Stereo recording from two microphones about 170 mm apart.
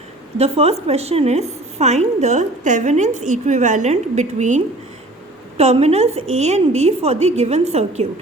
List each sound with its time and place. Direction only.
0.3 s a woman's voice: 35° right (ahead or behind)